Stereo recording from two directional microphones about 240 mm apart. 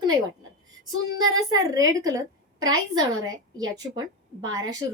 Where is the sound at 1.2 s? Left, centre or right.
Centre.